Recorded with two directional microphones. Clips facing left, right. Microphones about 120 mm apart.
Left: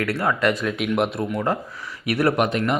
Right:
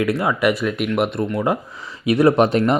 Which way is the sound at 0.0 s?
15° right (ahead or behind).